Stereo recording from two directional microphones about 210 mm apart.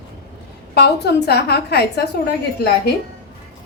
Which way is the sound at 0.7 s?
50° left (ahead or behind).